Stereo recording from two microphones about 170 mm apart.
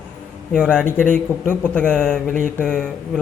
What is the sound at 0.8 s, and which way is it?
Speech, 50° left (ahead or behind).